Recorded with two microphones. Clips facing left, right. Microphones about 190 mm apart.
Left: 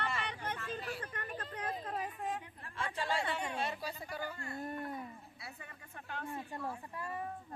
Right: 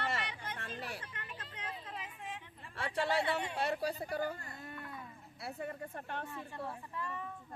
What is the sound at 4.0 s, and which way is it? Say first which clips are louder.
Speech: right 5 dB; 55° right (ahead or behind).